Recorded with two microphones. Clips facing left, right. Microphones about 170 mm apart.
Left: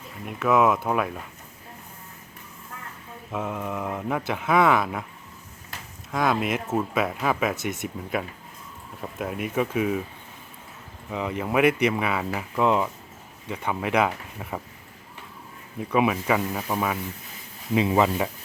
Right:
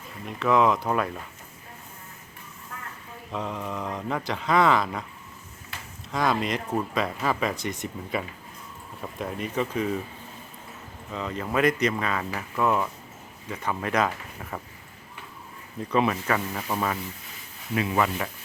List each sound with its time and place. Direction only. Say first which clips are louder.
0.3 s speech: left 1 dB; 5° left (ahead or behind)
3.3 s speech: left 2 dB; 5° left (ahead or behind)
6.1 s speech: left 1 dB; centre (ahead or behind)
11.1 s speech: left 3 dB; 15° left (ahead or behind)
15.8 s speech: left 2 dB; 10° left (ahead or behind)
17.7 s speech: left 4 dB; 25° left (ahead or behind)